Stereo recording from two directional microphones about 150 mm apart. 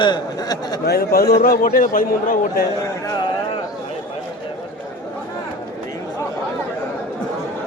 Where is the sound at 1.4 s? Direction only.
70° left (ahead or behind).